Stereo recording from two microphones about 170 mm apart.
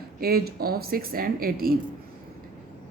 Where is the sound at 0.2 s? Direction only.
65° right (ahead or behind).